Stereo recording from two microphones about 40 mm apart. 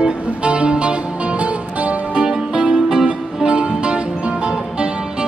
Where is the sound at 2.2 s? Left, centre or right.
Centre.